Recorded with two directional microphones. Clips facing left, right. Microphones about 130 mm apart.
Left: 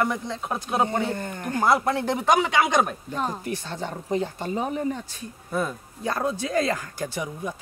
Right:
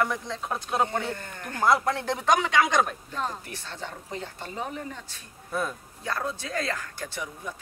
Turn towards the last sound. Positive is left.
turn(degrees=15)  # may be behind; listen again after turning